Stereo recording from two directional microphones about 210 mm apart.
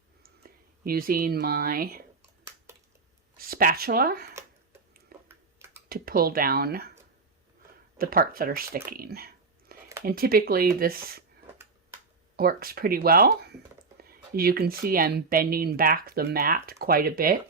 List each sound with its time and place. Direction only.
0.2 s speech: 45° right (ahead or behind)
3.3 s speech: 45° right (ahead or behind)
5.3 s a sound: 10° right (ahead or behind)
5.9 s speech: 45° right (ahead or behind)
7.9 s speech: 45° right (ahead or behind)
12.4 s speech: 45° right (ahead or behind)